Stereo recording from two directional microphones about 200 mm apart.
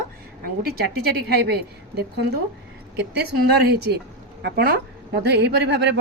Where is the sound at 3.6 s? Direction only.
55° right (ahead or behind).